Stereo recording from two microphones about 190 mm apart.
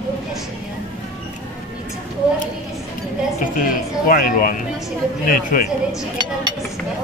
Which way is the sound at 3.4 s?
45° left (ahead or behind).